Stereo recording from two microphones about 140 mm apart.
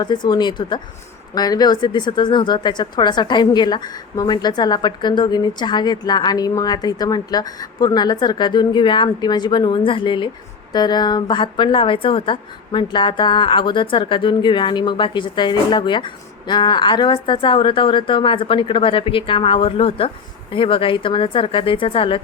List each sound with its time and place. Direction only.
0.0 s a woman's voice: 30° left (ahead or behind)